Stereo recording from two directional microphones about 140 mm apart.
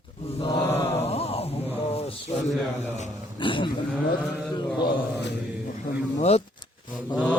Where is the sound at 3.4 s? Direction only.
35° left (ahead or behind).